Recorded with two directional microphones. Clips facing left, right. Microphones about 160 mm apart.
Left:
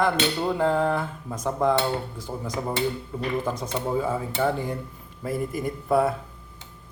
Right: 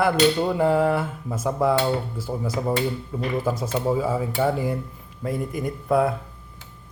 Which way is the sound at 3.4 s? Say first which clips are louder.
Right 4 dB; 5° right (ahead or behind).